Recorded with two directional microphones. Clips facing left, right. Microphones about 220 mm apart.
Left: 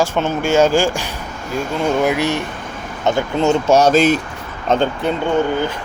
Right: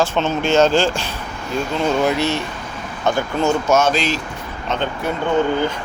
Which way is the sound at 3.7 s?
40° left (ahead or behind).